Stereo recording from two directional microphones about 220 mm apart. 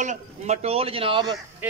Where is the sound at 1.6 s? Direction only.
10° right (ahead or behind).